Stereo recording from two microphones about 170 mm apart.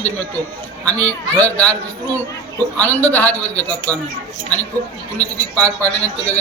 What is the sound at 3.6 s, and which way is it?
Speech, 20° right (ahead or behind).